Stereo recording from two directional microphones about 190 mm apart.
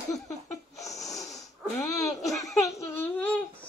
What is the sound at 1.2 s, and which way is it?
Snoring, centre (ahead or behind).